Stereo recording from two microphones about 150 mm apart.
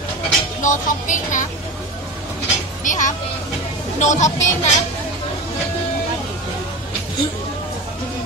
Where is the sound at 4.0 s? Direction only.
50° left (ahead or behind).